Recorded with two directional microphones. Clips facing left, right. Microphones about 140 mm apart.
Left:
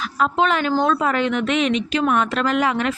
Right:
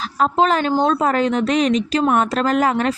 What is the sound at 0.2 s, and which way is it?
Speech, 35° right (ahead or behind).